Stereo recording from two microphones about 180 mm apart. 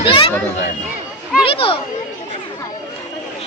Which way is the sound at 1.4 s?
30° left (ahead or behind).